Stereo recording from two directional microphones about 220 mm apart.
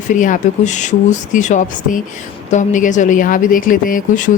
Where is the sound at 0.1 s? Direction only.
35° left (ahead or behind).